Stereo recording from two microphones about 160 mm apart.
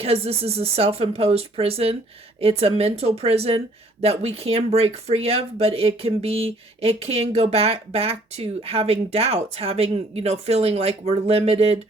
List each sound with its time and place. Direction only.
0.0 s speech: 40° right (ahead or behind)